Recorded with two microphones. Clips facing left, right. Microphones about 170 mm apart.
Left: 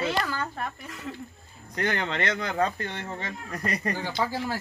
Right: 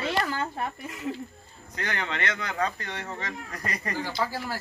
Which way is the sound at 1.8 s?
25° left (ahead or behind).